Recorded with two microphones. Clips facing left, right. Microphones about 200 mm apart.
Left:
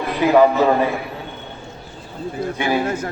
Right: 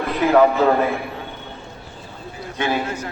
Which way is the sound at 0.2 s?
15° left (ahead or behind).